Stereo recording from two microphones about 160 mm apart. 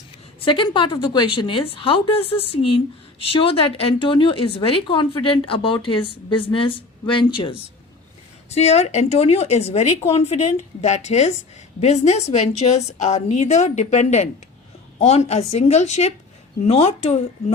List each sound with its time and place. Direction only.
0.4 s a woman's voice: 30° left (ahead or behind)